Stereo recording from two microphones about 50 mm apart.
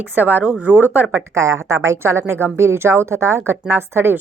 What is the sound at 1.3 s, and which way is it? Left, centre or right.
A woman's voice, right.